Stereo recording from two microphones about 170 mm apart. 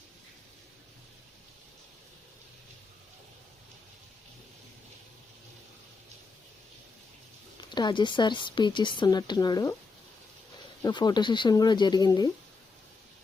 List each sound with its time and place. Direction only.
7.7 s speech: 25° left (ahead or behind)
10.8 s speech: 25° left (ahead or behind)